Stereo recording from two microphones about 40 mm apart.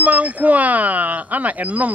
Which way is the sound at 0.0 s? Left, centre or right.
Right.